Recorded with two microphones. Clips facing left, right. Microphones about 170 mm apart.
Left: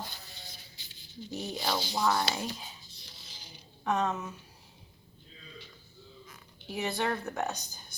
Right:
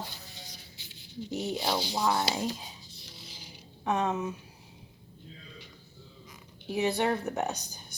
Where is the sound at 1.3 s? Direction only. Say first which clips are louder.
Right 3 dB; 25° right (ahead or behind).